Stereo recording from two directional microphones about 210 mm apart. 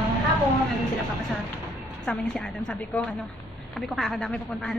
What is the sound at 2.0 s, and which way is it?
A woman's voice, centre (ahead or behind).